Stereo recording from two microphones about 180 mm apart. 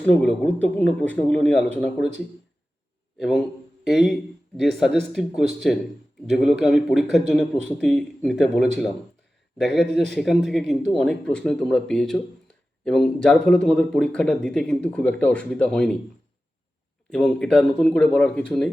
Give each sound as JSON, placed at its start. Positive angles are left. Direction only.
{"t": 0.0, "sound": "speech", "side_deg": 5}
{"t": 3.2, "sound": "a man's voice", "side_deg": 0}
{"t": 17.1, "sound": "speech", "side_deg": 5}